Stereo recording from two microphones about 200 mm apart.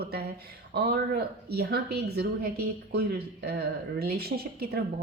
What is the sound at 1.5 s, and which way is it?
Speech, 50° right (ahead or behind).